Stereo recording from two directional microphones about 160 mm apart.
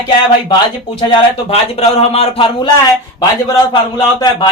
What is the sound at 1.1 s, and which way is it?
Speech, 30° left (ahead or behind).